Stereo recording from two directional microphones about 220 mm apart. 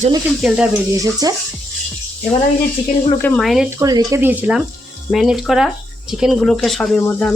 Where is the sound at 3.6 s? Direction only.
15° right (ahead or behind).